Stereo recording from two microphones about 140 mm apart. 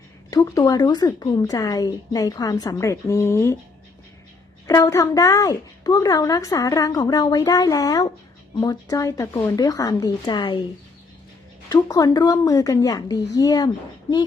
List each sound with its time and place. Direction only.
0.3 s a woman's voice: 25° left (ahead or behind)
4.6 s a woman's voice: 25° left (ahead or behind)
11.7 s a woman's voice: 25° left (ahead or behind)